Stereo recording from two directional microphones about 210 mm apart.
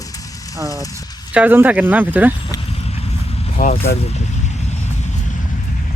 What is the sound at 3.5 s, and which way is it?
Speech, 40° left (ahead or behind).